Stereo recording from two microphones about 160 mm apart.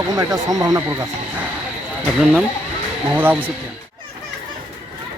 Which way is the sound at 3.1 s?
10° right (ahead or behind).